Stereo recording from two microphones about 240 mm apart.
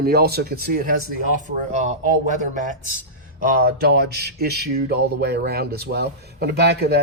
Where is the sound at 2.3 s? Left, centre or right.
Right.